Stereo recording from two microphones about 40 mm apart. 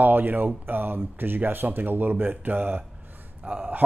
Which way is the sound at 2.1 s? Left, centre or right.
Right.